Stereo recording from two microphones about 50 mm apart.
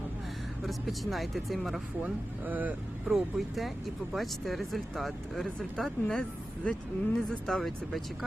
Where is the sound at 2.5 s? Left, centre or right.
Right.